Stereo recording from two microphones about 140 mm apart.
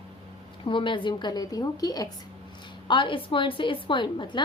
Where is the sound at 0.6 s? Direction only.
35° left (ahead or behind).